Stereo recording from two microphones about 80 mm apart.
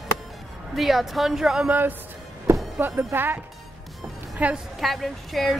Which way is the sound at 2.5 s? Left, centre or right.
Right.